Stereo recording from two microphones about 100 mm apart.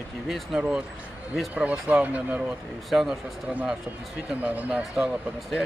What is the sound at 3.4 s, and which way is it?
Speech, 10° right (ahead or behind).